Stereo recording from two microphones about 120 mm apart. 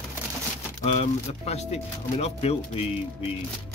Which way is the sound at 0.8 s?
65° left (ahead or behind).